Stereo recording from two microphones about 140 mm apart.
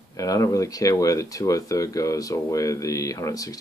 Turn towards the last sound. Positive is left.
turn(degrees=25)  # may be behind; listen again after turning